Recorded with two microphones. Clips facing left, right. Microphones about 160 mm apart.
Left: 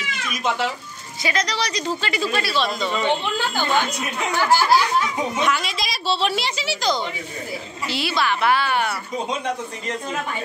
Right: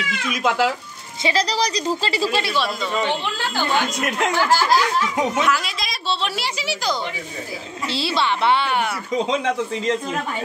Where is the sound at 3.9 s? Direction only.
90° right.